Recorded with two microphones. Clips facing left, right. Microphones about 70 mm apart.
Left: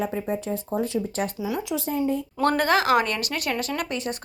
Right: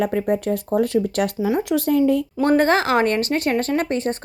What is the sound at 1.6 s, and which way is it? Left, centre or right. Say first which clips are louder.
Speech: right 8 dB; right.